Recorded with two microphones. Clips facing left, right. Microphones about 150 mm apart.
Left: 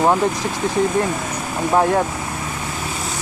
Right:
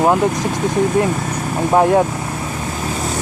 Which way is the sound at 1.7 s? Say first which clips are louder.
Right 4 dB; 20° right (ahead or behind).